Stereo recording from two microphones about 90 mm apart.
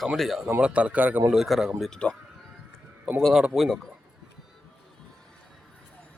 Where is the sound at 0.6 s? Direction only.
15° right (ahead or behind).